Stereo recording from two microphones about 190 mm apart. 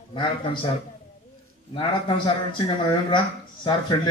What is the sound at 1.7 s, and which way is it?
A man's voice, 25° left (ahead or behind).